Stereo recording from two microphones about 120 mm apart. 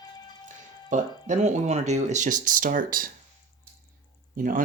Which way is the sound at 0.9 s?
90° right.